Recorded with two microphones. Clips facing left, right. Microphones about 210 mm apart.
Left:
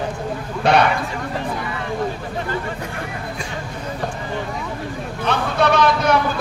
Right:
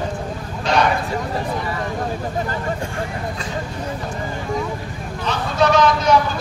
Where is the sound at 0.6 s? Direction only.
60° left (ahead or behind).